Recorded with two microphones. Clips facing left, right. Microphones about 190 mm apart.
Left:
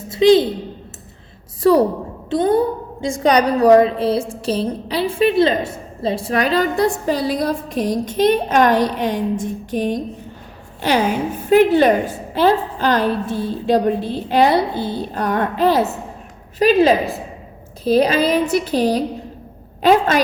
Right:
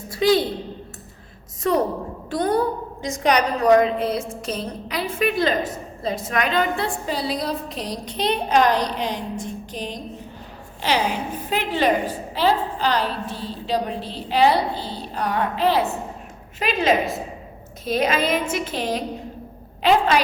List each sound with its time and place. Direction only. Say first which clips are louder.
0.1 s a woman's voice: left 7 dB; 20° left (ahead or behind)
2.3 s a woman's voice: left 5 dB; 25° left (ahead or behind); by 20.1 s 45° left (ahead or behind)